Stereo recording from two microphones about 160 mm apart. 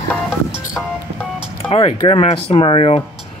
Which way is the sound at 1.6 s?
35° left (ahead or behind).